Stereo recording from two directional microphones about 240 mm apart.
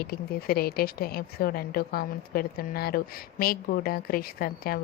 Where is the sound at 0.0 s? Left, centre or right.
Left.